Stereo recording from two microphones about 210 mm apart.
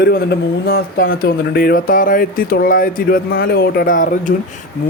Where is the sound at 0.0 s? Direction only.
50° left (ahead or behind).